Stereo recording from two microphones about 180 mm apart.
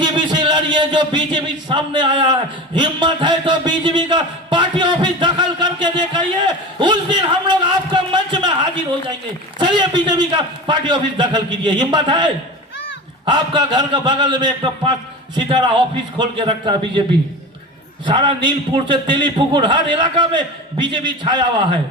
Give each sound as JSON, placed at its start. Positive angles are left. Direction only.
{"t": 0.0, "sound": "a sound", "side_deg": -25}
{"t": 9.6, "sound": "a man's voice", "side_deg": -25}
{"t": 13.3, "sound": "a man's voice", "side_deg": -25}
{"t": 18.0, "sound": "a man's voice", "side_deg": -25}